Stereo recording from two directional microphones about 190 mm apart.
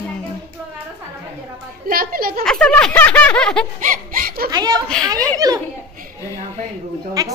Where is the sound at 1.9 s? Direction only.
50° right (ahead or behind).